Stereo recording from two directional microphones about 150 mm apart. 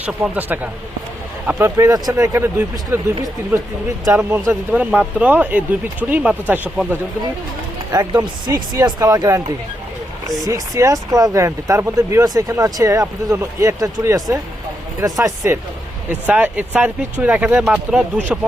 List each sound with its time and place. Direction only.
0.0 s speech: 10° right (ahead or behind)
4.0 s speech: 20° right (ahead or behind)
7.9 s speech: 30° right (ahead or behind)
16.2 s speech: 10° right (ahead or behind)